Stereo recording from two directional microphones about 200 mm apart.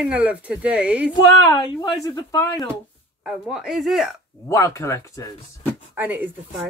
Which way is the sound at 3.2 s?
Centre (ahead or behind).